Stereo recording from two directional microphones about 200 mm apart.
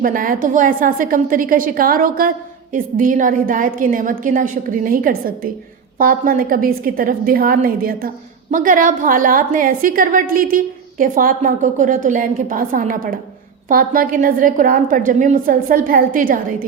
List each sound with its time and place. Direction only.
0.0 s a woman's voice: 45° right (ahead or behind)